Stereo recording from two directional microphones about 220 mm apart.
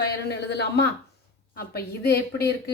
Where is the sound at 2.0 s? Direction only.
45° left (ahead or behind).